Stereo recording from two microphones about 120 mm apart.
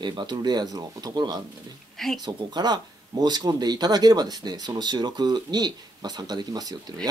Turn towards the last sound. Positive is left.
turn(degrees=-35)  # may be behind; listen again after turning